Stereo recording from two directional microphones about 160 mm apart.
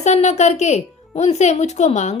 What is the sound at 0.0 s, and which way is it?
Speech, 45° left (ahead or behind).